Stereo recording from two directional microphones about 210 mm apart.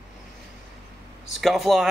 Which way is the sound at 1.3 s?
Centre (ahead or behind).